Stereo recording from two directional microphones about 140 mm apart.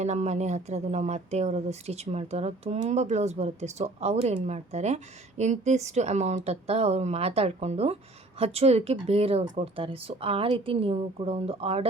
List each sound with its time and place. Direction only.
0.0 s speech: 55° right (ahead or behind)